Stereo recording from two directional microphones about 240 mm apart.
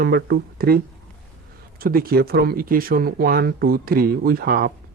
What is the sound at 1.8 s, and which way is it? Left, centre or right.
Speech, right.